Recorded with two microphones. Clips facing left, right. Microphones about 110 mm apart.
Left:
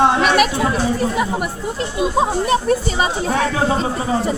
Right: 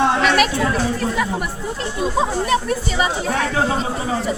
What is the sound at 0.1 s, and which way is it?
Chatter, 15° left (ahead or behind).